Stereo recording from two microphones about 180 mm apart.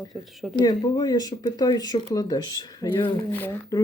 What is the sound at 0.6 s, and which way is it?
Speech, 20° left (ahead or behind).